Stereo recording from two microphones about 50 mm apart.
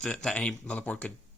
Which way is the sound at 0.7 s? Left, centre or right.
Left.